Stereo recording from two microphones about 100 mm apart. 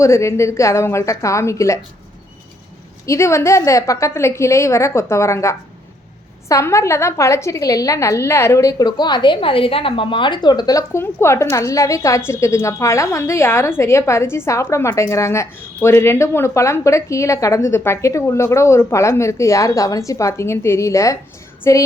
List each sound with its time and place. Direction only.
0.0 s a woman's voice: 30° left (ahead or behind)
3.1 s a woman's voice: 30° left (ahead or behind)
9.0 s a woman's voice: 50° left (ahead or behind); by 21.8 s 30° left (ahead or behind)